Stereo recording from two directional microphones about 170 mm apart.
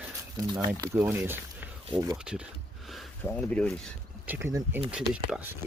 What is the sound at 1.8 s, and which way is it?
Speech, 25° right (ahead or behind).